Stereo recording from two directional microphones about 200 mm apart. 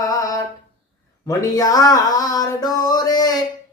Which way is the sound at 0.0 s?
15° left (ahead or behind).